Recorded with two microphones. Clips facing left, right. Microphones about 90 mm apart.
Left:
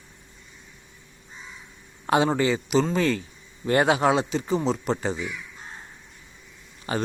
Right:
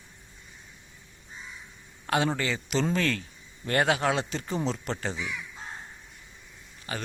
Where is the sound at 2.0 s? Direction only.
20° left (ahead or behind).